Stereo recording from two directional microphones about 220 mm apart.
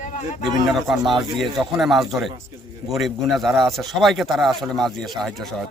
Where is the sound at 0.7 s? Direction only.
Centre (ahead or behind).